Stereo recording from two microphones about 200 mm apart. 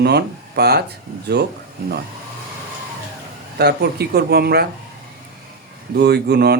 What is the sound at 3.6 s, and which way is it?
Speech, 55° right (ahead or behind).